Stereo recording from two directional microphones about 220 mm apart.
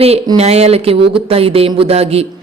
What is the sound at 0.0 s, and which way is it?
Speech, 25° right (ahead or behind).